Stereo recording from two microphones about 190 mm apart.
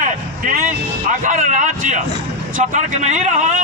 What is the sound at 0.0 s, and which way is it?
Music, 45° right (ahead or behind).